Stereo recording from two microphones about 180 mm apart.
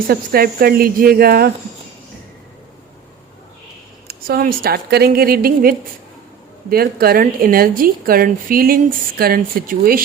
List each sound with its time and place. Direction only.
0.1 s a woman's voice: 55° right (ahead or behind)
4.1 s a woman's voice: 60° right (ahead or behind)